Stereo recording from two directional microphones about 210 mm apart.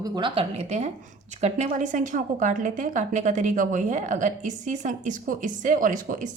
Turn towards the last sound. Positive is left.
turn(degrees=-40)  # may be behind; listen again after turning